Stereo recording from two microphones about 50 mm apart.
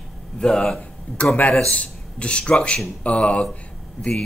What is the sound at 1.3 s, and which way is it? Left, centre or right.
A man's voice, left.